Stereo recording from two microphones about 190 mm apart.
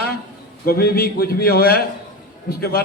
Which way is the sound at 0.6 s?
55° left (ahead or behind).